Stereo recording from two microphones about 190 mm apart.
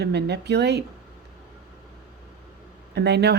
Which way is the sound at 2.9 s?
60° right (ahead or behind).